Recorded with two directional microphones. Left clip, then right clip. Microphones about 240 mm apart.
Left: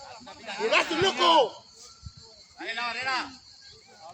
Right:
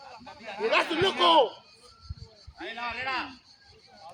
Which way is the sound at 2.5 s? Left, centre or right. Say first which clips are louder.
Left 3 dB; left.